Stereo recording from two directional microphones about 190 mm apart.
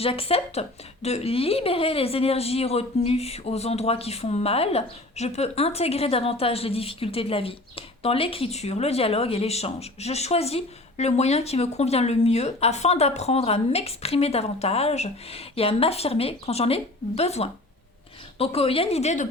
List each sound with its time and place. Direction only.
0.0 s a woman's voice: 30° left (ahead or behind)